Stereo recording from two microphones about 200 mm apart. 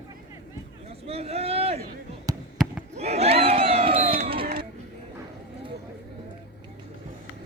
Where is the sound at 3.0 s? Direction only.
30° right (ahead or behind).